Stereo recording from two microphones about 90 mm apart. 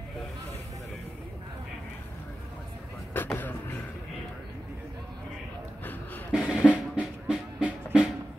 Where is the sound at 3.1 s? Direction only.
25° left (ahead or behind).